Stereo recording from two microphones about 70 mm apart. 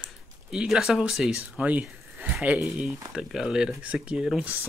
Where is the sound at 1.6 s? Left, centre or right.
Right.